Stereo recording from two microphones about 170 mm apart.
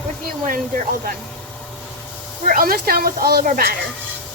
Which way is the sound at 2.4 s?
60° right (ahead or behind).